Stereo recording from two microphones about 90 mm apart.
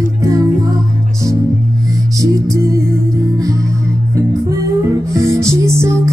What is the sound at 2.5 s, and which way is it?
Music, 35° right (ahead or behind).